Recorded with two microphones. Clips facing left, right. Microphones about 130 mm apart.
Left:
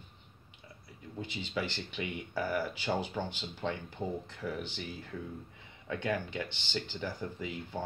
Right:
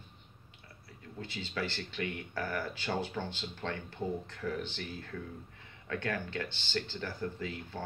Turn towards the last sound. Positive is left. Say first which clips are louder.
# left 1 dB
turn(degrees=15)  # may be behind; listen again after turning